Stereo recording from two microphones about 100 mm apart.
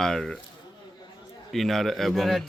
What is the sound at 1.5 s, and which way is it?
Speech, centre (ahead or behind).